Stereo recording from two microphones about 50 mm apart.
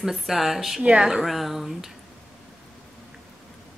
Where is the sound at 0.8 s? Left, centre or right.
Centre.